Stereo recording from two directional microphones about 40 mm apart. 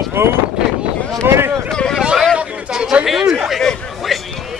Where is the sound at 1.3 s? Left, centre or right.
Right.